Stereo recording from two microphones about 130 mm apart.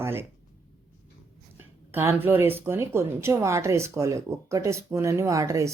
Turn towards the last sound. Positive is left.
turn(degrees=-25)  # may be behind; listen again after turning